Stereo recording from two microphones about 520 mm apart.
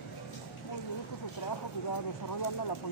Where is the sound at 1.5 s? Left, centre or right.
Left.